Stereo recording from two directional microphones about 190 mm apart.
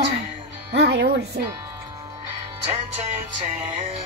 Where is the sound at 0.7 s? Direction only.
60° right (ahead or behind).